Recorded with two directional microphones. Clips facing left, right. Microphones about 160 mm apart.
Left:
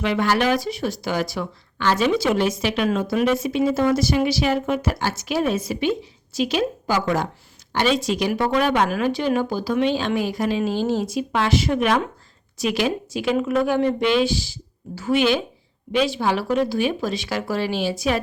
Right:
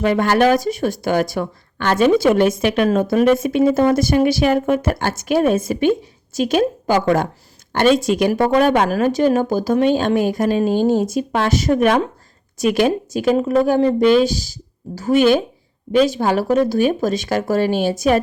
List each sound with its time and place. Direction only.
0.0 s speech: 50° right (ahead or behind)